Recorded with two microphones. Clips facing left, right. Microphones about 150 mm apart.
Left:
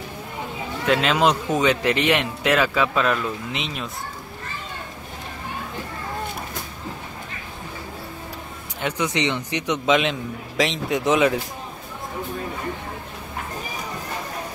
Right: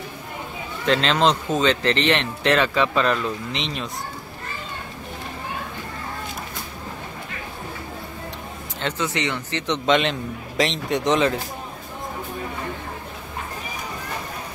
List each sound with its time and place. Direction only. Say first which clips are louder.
0.8 s speech: even; 10° left (ahead or behind)
8.8 s speech: left 2 dB; 15° left (ahead or behind)
9.8 s speech: right 1 dB; centre (ahead or behind)